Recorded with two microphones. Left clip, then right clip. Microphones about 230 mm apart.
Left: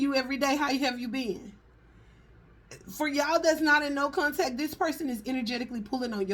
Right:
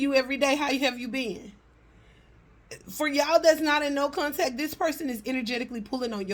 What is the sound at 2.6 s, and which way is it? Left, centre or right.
A woman's voice, right.